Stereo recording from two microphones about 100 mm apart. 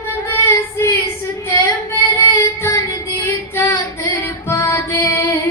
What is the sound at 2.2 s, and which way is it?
Female singing, 30° left (ahead or behind).